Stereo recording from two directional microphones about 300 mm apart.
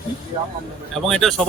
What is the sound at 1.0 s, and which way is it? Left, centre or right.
Speech, centre.